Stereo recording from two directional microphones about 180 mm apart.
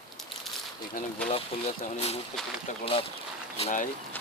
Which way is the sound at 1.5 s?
30° left (ahead or behind).